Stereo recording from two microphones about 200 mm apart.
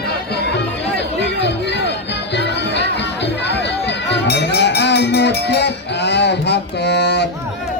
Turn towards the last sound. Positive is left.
turn(degrees=55)  # may be behind; listen again after turning